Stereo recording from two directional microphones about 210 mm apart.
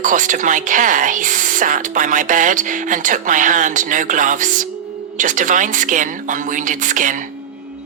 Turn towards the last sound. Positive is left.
turn(degrees=-40)  # may be behind; listen again after turning